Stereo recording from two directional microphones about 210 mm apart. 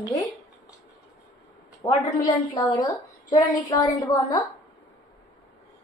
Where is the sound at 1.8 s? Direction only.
15° left (ahead or behind).